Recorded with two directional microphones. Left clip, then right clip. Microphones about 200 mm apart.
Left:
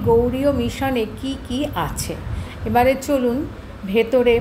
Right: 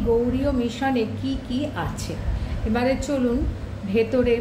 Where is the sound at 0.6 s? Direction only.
25° left (ahead or behind).